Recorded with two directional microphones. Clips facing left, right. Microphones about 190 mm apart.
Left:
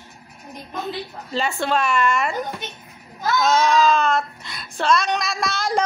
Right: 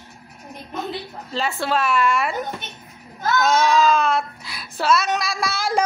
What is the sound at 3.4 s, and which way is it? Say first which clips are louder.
A child's voice: even; 5° right (ahead or behind).